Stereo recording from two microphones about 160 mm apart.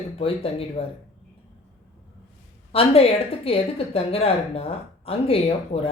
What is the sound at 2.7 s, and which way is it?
Speech, 35° left (ahead or behind).